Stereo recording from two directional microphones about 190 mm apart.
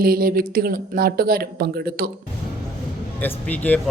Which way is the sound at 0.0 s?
50° right (ahead or behind).